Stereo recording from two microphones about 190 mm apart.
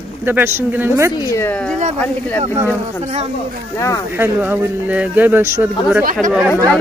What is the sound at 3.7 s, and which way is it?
Speech, 15° left (ahead or behind).